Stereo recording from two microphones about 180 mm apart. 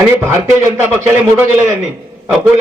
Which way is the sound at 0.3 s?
15° right (ahead or behind).